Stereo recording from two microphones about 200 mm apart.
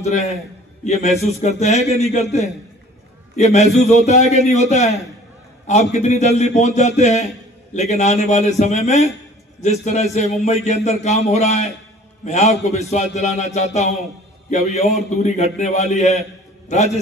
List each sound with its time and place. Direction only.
0.0 s a man's voice: 35° left (ahead or behind)
1.4 s a man's voice: 35° left (ahead or behind)
3.3 s a man's voice: 35° left (ahead or behind)